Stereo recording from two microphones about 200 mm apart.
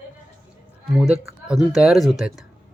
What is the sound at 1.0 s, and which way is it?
Speech, 5° right (ahead or behind).